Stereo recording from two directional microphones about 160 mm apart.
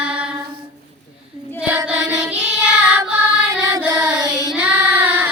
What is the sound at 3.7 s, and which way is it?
Child singing, 20° right (ahead or behind).